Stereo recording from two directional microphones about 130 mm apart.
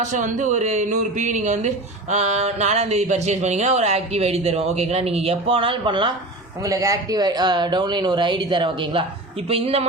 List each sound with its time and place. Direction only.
0.0 s speech: 75° right (ahead or behind); by 6.1 s 40° right (ahead or behind)
6.6 s a woman's voice: 25° right (ahead or behind); by 9.8 s 50° right (ahead or behind)